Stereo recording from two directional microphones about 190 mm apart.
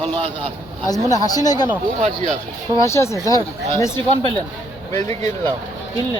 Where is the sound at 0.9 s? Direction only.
20° left (ahead or behind).